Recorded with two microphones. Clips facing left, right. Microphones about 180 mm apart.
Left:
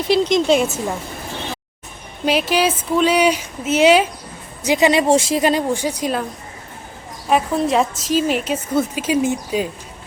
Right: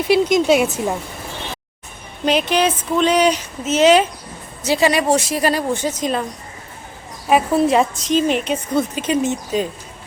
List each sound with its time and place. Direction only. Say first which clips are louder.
0.1 s a woman's voice: right 1 dB; 5° right (ahead or behind)
2.2 s speech: even; 5° left (ahead or behind)
7.3 s a woman's voice: right 2 dB; 5° right (ahead or behind)